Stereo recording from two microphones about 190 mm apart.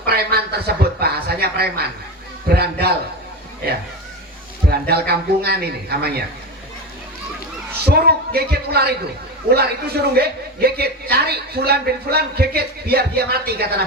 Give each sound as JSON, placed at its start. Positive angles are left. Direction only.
{"t": 0.0, "sound": "chuckle", "side_deg": -55}
{"t": 2.6, "sound": "a man's voice", "side_deg": -55}
{"t": 4.7, "sound": "a man's voice", "side_deg": -55}
{"t": 7.9, "sound": "a man's voice", "side_deg": -55}